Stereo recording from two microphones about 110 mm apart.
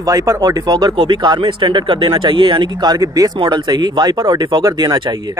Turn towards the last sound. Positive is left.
turn(degrees=-35)  # may be behind; listen again after turning